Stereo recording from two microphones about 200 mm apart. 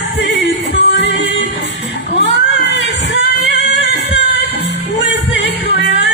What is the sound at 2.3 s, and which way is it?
Female singing, 60° left (ahead or behind).